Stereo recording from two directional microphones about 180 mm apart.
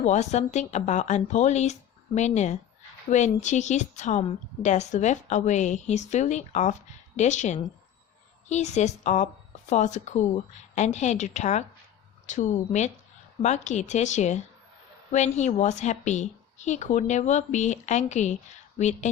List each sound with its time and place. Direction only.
0.0 s a woman's voice: 40° left (ahead or behind)